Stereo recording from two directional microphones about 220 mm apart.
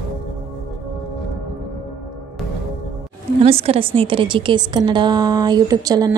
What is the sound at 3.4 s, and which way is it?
A woman's voice, 25° right (ahead or behind).